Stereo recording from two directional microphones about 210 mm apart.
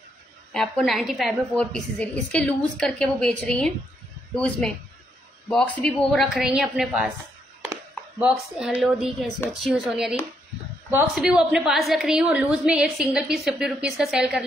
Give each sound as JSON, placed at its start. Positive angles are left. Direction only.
{"t": 0.5, "sound": "a woman's voice", "side_deg": 0}
{"t": 8.2, "sound": "a woman's voice", "side_deg": -5}